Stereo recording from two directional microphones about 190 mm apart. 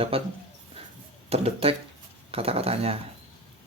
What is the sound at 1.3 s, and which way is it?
Speech, 30° right (ahead or behind).